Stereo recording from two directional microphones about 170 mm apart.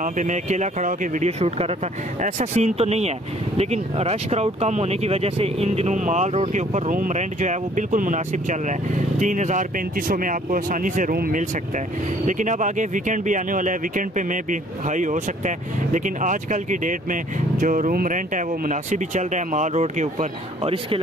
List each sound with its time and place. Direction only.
0.0 s speech: 45° right (ahead or behind)
12.3 s speech: 45° right (ahead or behind)